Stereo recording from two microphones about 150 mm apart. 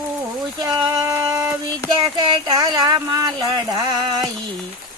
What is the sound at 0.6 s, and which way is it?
Speech, 25° right (ahead or behind).